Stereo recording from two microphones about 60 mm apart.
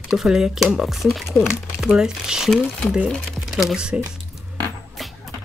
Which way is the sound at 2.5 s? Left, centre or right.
Centre.